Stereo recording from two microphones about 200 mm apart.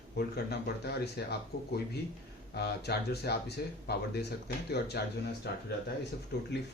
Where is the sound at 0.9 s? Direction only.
55° left (ahead or behind).